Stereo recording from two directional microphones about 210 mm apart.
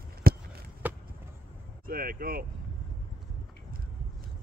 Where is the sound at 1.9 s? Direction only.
45° right (ahead or behind).